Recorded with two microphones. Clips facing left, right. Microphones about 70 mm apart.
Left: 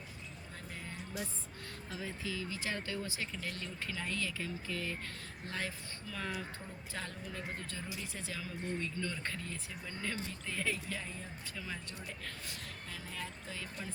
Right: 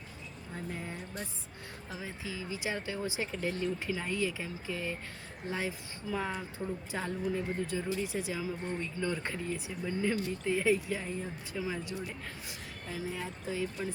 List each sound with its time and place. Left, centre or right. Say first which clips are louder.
1.9 s speech: even; centre